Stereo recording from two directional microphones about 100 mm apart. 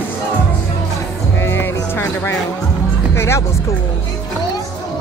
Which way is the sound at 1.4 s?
25° left (ahead or behind).